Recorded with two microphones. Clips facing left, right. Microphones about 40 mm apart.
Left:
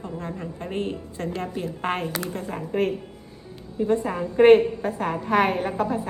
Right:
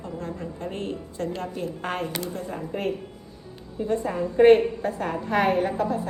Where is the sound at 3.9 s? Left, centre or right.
Left; by 5.8 s centre.